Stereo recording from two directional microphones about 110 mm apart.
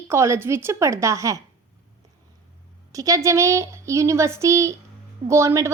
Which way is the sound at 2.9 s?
30° right (ahead or behind).